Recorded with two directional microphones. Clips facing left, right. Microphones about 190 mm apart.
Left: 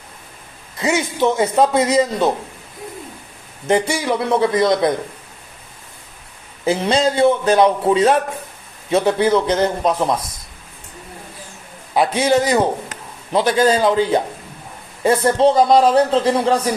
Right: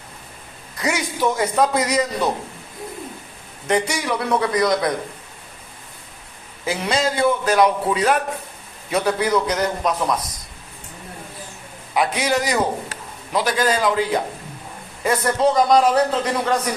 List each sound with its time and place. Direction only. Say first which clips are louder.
0.8 s a man's voice: left 4 dB; 25° left (ahead or behind)
3.7 s a man's voice: left 4 dB; 30° left (ahead or behind)
6.7 s a man's voice: left 5 dB; 30° left (ahead or behind)
11.9 s a man's voice: left 5 dB; 25° left (ahead or behind)